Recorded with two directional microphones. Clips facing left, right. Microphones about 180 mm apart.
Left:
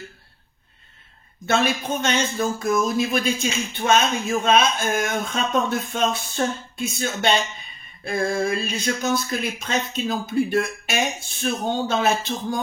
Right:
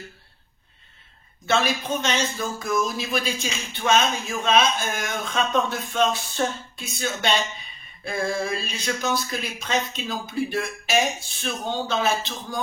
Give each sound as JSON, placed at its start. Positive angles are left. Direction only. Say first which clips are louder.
{"t": 1.5, "sound": "speech", "louder": "left 1 dB", "side_deg": 50}